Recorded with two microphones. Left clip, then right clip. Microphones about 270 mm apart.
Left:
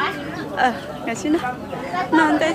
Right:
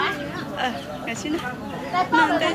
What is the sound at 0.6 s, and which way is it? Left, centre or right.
Speech, centre.